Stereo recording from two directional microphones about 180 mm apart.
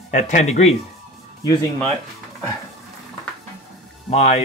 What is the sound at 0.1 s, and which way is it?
Speech, 40° left (ahead or behind).